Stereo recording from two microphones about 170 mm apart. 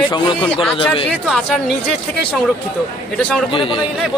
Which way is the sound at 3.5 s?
30° left (ahead or behind).